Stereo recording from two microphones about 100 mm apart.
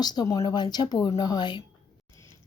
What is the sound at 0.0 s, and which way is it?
Speech, 45° left (ahead or behind).